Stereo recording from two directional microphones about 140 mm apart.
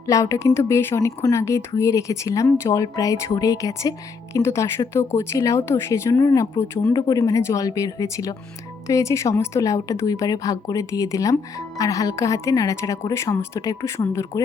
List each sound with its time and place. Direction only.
0.1 s speech: 20° left (ahead or behind)